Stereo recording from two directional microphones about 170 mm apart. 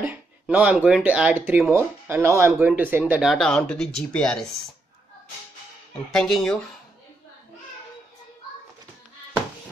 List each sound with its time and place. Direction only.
0.0 s speech: 10° right (ahead or behind)
5.9 s speech: centre (ahead or behind)